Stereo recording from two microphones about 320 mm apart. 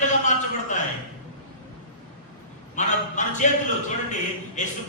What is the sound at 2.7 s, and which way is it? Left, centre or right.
Speech, left.